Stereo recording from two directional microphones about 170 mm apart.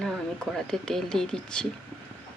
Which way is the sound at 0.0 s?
5° left (ahead or behind).